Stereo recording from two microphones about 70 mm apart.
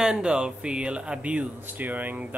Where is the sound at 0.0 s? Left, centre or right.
Centre.